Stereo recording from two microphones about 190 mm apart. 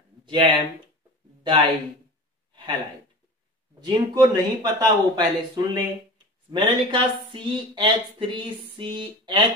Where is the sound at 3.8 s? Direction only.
20° right (ahead or behind).